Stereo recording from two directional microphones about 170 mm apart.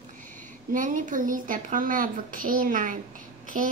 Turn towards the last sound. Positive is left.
turn(degrees=-50)  # may be behind; listen again after turning